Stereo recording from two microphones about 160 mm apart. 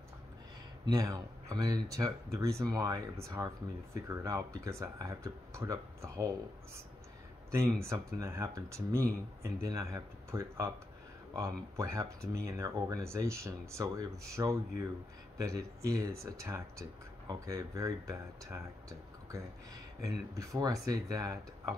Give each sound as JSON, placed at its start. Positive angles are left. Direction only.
{"t": 0.8, "sound": "speech", "side_deg": -25}
{"t": 15.9, "sound": "speech", "side_deg": -20}